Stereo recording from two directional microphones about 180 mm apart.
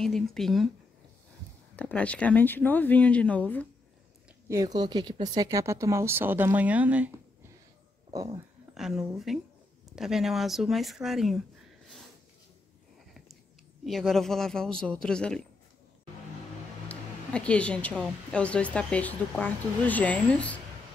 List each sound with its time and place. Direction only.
0.0 s speech: centre (ahead or behind)
1.8 s speech: 5° left (ahead or behind)
4.5 s speech: 20° right (ahead or behind)
8.7 s speech: 5° right (ahead or behind)
13.8 s speech: centre (ahead or behind)
16.8 s speech: 5° left (ahead or behind)